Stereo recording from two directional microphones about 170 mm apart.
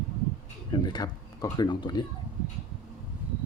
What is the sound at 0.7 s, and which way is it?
Speech, 25° left (ahead or behind).